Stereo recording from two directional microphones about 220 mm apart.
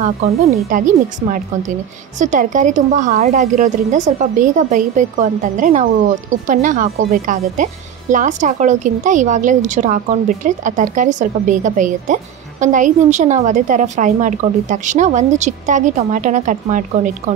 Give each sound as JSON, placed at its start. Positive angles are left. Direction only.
{"t": 0.2, "sound": "speech", "side_deg": -35}